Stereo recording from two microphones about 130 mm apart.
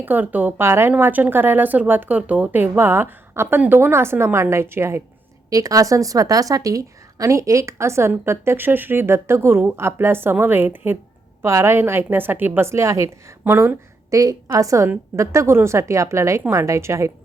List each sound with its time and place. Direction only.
0.0 s a woman's voice: 15° right (ahead or behind)